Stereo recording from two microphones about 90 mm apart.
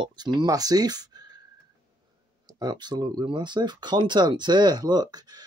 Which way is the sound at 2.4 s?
50° right (ahead or behind).